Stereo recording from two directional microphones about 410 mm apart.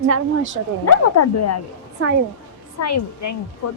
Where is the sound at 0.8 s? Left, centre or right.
Left.